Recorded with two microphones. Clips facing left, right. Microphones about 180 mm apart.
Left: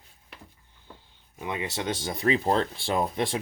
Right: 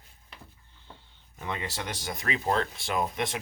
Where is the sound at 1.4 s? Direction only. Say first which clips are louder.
Left 3 dB; 15° left (ahead or behind).